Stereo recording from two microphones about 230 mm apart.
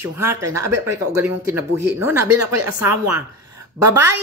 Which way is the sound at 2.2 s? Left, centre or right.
Right.